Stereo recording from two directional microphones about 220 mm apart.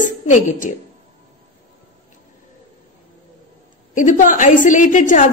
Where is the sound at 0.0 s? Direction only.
35° left (ahead or behind).